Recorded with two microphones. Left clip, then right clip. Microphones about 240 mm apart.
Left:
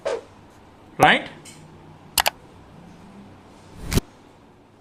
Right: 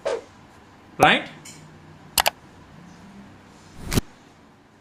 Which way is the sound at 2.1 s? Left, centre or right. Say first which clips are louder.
Even; centre.